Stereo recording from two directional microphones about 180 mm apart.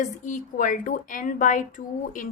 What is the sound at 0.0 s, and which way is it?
A woman's voice, 45° left (ahead or behind).